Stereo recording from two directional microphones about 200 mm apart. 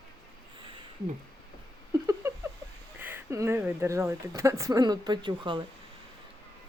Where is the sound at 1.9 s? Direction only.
15° right (ahead or behind).